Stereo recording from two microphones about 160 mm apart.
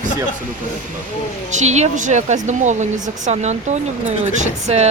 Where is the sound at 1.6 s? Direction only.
45° right (ahead or behind).